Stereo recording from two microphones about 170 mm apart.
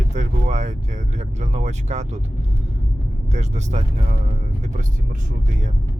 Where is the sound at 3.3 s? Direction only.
40° right (ahead or behind).